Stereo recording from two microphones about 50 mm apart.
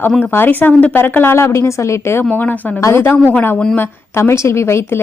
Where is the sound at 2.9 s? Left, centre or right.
Left.